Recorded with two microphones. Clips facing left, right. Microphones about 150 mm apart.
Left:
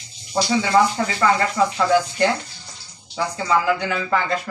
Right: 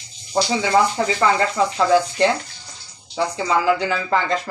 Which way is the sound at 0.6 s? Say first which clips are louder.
Left 1 dB; 20° right (ahead or behind).